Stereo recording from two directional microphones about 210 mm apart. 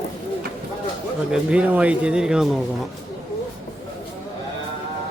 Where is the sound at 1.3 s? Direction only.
5° right (ahead or behind).